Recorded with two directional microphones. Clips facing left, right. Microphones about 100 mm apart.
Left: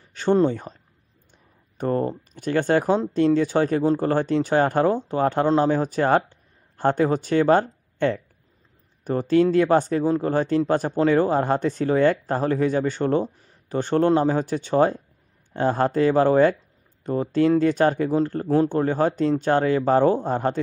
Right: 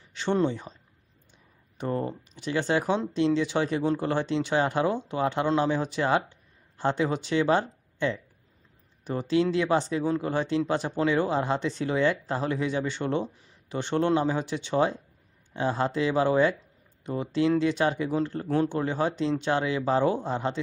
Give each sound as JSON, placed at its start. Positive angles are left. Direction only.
{"t": 0.1, "sound": "speech", "side_deg": 45}
{"t": 1.8, "sound": "speech", "side_deg": 45}